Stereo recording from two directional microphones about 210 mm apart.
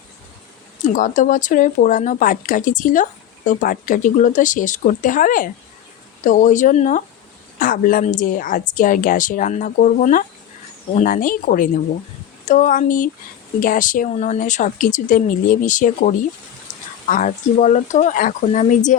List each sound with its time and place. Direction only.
0.9 s speech: 40° left (ahead or behind)